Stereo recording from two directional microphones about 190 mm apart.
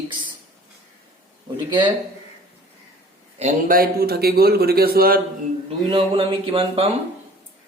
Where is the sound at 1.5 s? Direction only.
25° right (ahead or behind).